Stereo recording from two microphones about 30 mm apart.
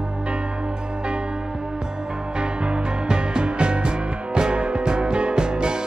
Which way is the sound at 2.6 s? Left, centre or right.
Right.